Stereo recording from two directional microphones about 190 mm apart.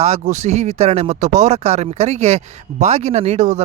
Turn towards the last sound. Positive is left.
turn(degrees=-35)  # may be behind; listen again after turning